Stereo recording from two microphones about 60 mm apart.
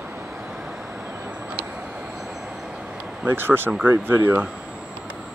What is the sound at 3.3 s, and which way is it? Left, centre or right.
Speech, right.